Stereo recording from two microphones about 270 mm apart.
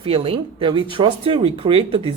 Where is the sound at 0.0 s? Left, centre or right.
Right.